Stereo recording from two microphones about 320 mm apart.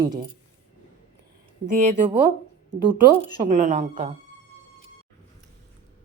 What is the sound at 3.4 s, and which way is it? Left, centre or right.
Speech, right.